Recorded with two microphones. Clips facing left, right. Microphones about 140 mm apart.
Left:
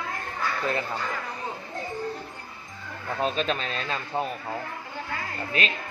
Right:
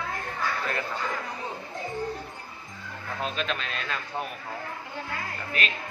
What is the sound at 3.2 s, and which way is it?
Speech, 35° left (ahead or behind).